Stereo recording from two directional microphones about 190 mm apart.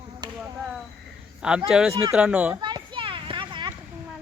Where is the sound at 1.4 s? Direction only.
5° right (ahead or behind).